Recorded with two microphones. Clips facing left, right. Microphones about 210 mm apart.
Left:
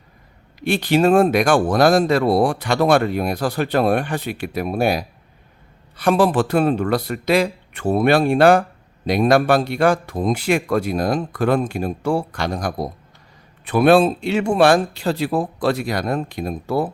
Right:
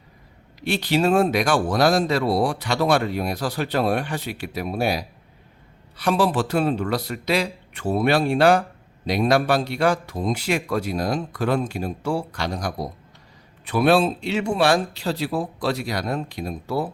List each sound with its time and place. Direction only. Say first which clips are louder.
0.6 s speech: left 4 dB; 50° left (ahead or behind)